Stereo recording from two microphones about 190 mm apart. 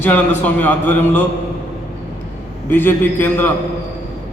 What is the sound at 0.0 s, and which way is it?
A man's voice, 10° left (ahead or behind).